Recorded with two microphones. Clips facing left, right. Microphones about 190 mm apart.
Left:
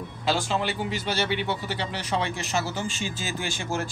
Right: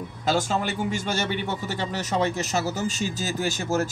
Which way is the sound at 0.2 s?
45° right (ahead or behind).